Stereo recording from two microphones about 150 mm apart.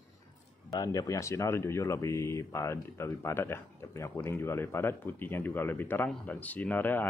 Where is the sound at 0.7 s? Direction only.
25° left (ahead or behind).